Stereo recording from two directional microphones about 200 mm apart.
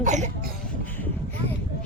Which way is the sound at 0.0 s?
35° right (ahead or behind).